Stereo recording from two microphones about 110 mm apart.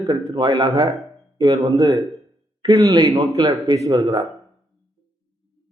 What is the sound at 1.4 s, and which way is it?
A man's voice, 30° right (ahead or behind).